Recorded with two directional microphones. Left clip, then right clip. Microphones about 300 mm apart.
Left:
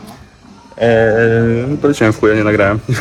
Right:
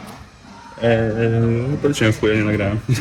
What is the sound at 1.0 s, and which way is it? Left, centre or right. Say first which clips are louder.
Speech: left 9 dB; centre.